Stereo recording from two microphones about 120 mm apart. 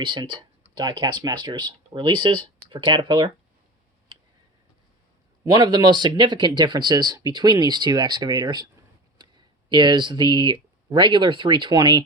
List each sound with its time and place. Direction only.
0.0 s speech: 40° right (ahead or behind)
5.4 s speech: 35° right (ahead or behind)